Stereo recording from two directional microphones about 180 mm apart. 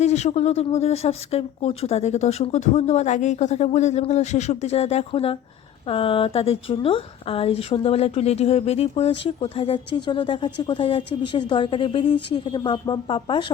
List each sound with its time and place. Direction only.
0.0 s a woman's voice: 40° left (ahead or behind)